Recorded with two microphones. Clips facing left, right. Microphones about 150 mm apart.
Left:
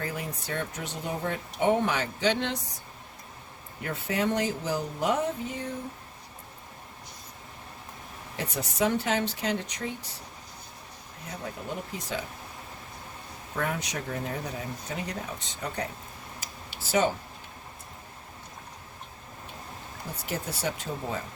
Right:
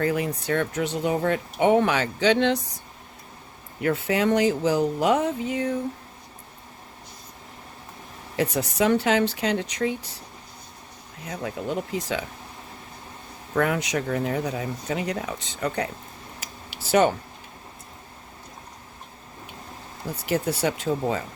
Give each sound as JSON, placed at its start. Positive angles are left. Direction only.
{"t": 0.0, "sound": "speech", "side_deg": -70}
{"t": 3.8, "sound": "speech", "side_deg": -90}
{"t": 8.4, "sound": "speech", "side_deg": -85}
{"t": 11.6, "sound": "speech", "side_deg": -90}
{"t": 13.6, "sound": "speech", "side_deg": -85}
{"t": 16.4, "sound": "a sound", "side_deg": -65}
{"t": 20.2, "sound": "speech", "side_deg": -70}